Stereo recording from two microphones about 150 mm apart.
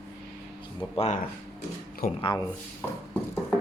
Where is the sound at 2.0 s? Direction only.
85° left.